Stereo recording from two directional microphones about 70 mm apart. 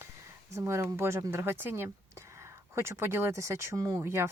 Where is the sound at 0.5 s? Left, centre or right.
Right.